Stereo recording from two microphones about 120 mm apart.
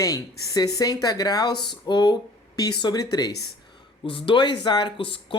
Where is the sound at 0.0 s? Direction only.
30° left (ahead or behind).